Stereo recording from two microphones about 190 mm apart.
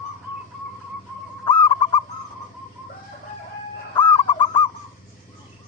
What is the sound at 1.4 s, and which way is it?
Owl, 25° left (ahead or behind).